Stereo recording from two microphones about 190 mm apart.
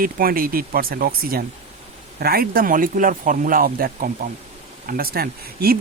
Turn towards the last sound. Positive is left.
turn(degrees=-55)  # may be behind; listen again after turning